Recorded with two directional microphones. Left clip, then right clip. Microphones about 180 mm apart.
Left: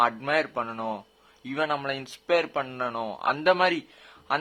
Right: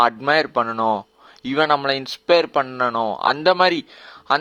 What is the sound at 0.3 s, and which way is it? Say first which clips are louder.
Speech: right 8 dB; 35° right (ahead or behind).